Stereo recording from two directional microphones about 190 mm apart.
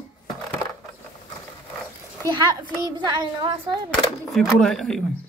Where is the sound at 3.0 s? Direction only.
20° right (ahead or behind).